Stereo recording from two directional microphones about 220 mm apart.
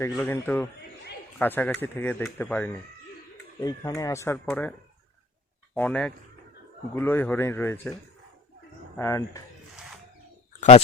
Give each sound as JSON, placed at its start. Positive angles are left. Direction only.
{"t": 0.1, "sound": "speech", "side_deg": 5}
{"t": 5.7, "sound": "speech", "side_deg": 5}
{"t": 9.0, "sound": "speech", "side_deg": 15}
{"t": 10.6, "sound": "speech", "side_deg": 30}